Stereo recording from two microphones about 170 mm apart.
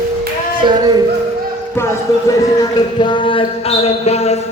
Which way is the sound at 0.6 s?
25° right (ahead or behind).